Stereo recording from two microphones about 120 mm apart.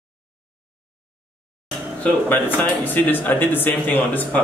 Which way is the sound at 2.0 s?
15° left (ahead or behind).